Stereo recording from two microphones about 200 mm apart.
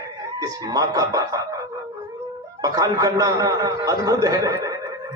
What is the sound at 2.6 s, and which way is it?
A man's voice, 20° right (ahead or behind).